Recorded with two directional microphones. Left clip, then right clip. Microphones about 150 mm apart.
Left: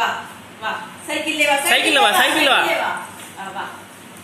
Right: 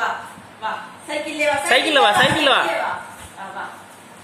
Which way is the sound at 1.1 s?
65° right (ahead or behind).